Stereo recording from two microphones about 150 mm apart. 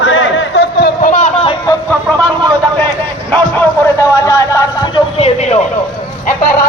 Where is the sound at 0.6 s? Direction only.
90° left.